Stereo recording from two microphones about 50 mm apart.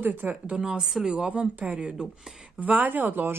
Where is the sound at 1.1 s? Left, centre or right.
Right.